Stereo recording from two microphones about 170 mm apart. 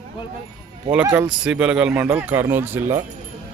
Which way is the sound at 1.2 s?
5° right (ahead or behind).